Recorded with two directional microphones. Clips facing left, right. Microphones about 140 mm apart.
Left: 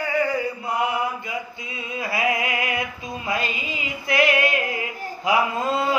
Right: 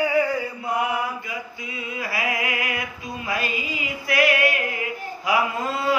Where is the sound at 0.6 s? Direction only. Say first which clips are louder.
Right 2 dB; 25° left (ahead or behind).